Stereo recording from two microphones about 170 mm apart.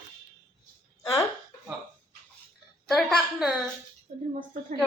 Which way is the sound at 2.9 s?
Centre (ahead or behind).